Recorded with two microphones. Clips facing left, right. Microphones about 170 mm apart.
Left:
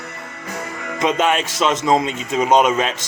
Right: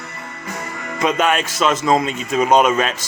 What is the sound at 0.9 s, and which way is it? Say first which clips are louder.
A man's voice: even; 25° left (ahead or behind).